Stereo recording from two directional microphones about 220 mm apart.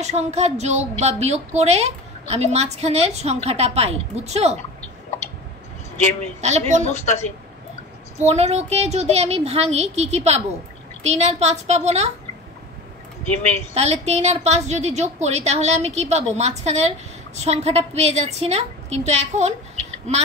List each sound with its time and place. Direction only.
0.0 s a woman's voice: 30° right (ahead or behind)
6.4 s a woman's voice: 30° right (ahead or behind)
6.9 s speech: 30° left (ahead or behind)
8.2 s a woman's voice: 30° right (ahead or behind)
13.7 s a woman's voice: 30° right (ahead or behind)